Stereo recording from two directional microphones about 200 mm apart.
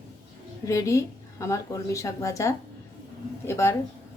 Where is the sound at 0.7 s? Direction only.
15° left (ahead or behind).